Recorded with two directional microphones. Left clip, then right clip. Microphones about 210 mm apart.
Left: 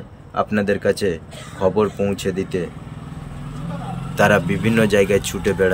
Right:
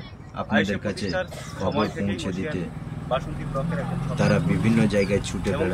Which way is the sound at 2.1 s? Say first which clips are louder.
Left 6 dB; 20° left (ahead or behind).